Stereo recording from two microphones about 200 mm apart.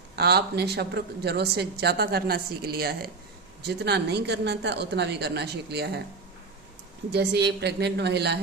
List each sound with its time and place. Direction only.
0.2 s a woman's voice: 55° right (ahead or behind)
7.1 s a woman's voice: 55° right (ahead or behind)